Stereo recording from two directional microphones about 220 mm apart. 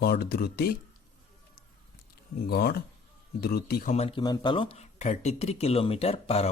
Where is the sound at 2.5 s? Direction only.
45° left (ahead or behind).